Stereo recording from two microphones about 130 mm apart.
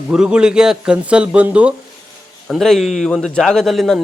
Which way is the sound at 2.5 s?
Centre (ahead or behind).